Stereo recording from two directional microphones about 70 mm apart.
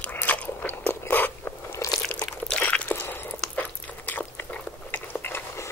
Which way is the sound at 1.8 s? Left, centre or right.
Left.